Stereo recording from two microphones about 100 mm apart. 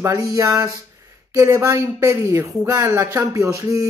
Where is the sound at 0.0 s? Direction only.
35° right (ahead or behind).